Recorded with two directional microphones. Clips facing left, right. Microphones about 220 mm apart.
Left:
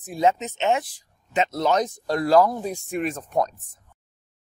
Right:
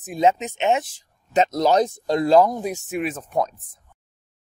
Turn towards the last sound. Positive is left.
turn(degrees=0)  # may be behind; listen again after turning